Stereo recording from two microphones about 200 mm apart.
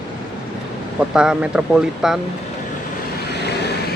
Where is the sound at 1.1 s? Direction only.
5° right (ahead or behind).